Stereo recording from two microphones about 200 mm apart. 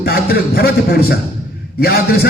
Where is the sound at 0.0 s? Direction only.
50° left (ahead or behind).